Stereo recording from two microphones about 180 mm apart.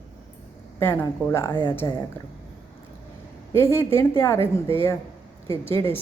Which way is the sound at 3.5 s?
15° left (ahead or behind).